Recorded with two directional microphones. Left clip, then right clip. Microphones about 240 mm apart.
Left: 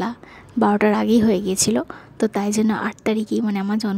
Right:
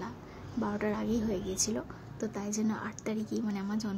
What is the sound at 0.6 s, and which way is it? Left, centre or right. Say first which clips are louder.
A woman's voice: left 16 dB; left.